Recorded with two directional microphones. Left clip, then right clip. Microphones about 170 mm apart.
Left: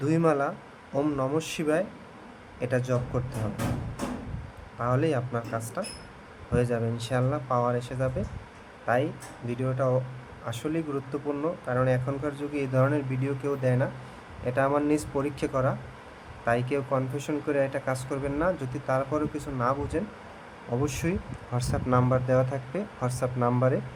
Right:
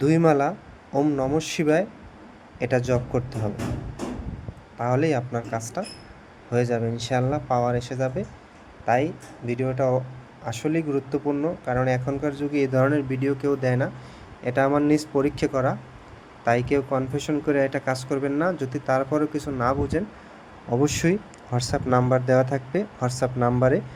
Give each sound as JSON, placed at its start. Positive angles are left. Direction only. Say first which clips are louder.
{"t": 0.0, "sound": "speech", "louder": "right 5 dB", "side_deg": -30}
{"t": 4.8, "sound": "speech", "louder": "right 4 dB", "side_deg": -20}